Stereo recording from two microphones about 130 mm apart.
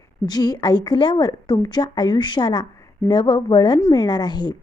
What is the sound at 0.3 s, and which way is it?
A woman's voice, 30° left (ahead or behind).